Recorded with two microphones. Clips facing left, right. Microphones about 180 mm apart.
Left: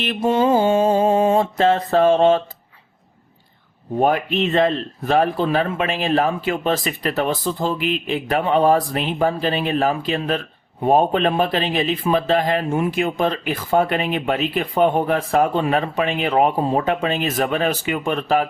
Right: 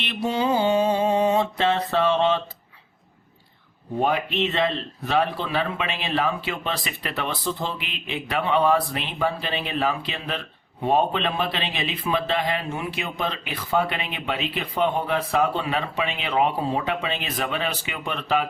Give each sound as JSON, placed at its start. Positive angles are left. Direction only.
{"t": 0.0, "sound": "speech", "side_deg": 45}
{"t": 4.0, "sound": "speech", "side_deg": 45}